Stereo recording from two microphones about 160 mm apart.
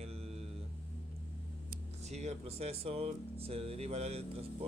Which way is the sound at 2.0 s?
45° right (ahead or behind).